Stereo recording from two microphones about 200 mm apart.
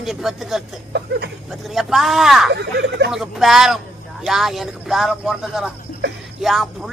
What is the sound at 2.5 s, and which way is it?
Speech, 55° right (ahead or behind).